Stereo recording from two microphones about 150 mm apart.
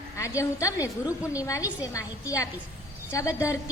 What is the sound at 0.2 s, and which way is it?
A woman's voice, 20° left (ahead or behind).